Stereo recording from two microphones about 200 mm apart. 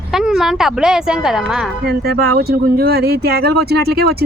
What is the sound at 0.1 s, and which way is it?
A woman's voice, centre (ahead or behind).